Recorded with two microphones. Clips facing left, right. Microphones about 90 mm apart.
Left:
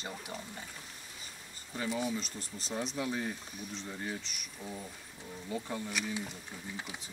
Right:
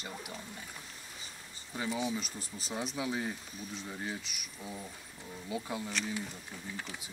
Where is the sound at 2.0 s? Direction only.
5° right (ahead or behind).